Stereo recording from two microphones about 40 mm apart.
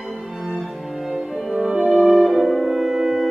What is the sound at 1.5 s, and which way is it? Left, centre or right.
Music, right.